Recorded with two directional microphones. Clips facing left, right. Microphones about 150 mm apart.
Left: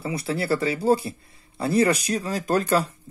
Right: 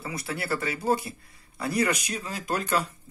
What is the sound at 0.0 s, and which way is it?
Speech, 30° left (ahead or behind).